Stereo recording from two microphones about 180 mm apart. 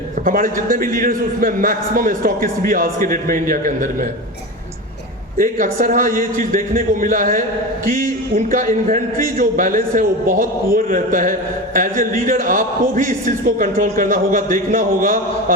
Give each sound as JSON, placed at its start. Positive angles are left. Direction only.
{"t": 0.3, "sound": "a man's voice", "side_deg": -50}
{"t": 5.4, "sound": "a man's voice", "side_deg": -50}